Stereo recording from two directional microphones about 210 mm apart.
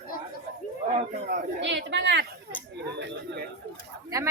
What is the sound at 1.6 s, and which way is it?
Speech, 60° right (ahead or behind).